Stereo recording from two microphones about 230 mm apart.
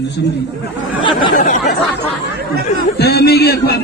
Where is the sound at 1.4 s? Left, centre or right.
Left.